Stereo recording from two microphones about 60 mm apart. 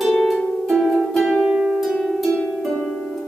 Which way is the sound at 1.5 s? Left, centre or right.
Centre.